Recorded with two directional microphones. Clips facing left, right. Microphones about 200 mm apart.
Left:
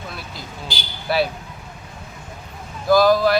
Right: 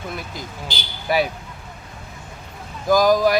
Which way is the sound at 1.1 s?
15° right (ahead or behind).